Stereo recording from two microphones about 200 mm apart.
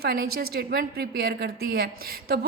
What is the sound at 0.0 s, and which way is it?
A woman's voice, 50° right (ahead or behind).